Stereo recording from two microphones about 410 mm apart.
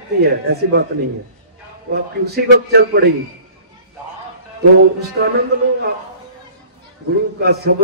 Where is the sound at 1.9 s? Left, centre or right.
Right.